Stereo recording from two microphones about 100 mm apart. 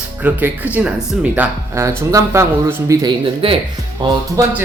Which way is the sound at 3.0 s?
65° right (ahead or behind).